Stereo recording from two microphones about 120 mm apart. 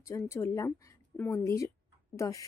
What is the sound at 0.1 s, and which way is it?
Speech, 20° left (ahead or behind).